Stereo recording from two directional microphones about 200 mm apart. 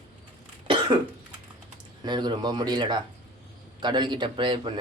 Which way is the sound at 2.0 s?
20° right (ahead or behind).